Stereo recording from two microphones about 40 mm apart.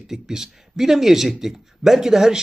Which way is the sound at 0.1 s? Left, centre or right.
Centre.